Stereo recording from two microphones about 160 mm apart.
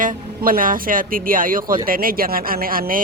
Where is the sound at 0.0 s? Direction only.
60° right (ahead or behind).